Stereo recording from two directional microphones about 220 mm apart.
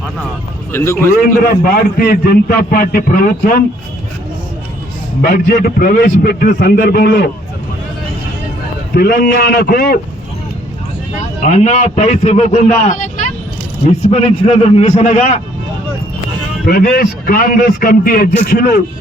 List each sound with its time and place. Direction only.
0.7 s a man's voice: 10° left (ahead or behind)
1.3 s a man's voice: 40° left (ahead or behind)
5.2 s a man's voice: 35° left (ahead or behind)
9.0 s a man's voice: 45° left (ahead or behind)
11.4 s a man's voice: 30° left (ahead or behind)
16.6 s a man's voice: 40° left (ahead or behind)